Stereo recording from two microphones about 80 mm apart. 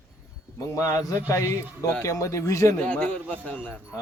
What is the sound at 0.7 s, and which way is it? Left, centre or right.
Speech, left.